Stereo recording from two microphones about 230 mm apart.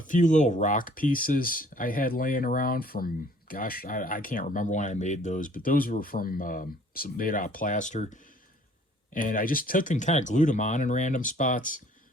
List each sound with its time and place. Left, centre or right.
0.0 s speech: left